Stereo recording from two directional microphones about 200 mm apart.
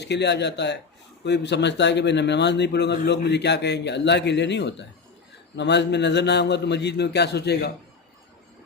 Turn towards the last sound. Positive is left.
turn(degrees=55)  # may be behind; listen again after turning